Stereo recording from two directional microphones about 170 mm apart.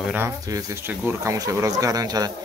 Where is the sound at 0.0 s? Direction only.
10° right (ahead or behind).